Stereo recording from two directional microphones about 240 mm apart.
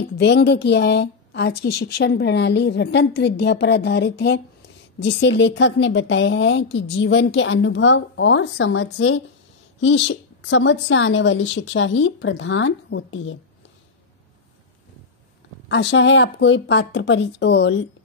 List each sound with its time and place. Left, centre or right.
0.2 s a woman's voice: left
15.7 s a woman's voice: left